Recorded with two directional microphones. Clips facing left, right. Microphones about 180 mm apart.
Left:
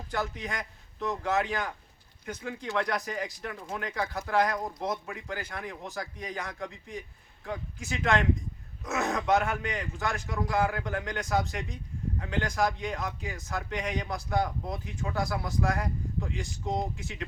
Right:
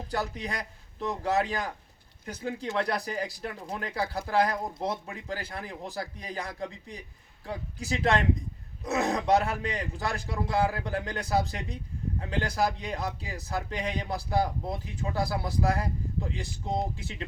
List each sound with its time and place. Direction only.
0.1 s speech: 35° right (ahead or behind)